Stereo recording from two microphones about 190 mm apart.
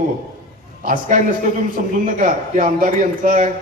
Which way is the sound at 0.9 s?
45° right (ahead or behind).